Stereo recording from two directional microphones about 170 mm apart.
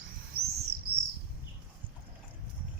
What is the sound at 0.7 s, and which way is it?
Bird, 70° right (ahead or behind).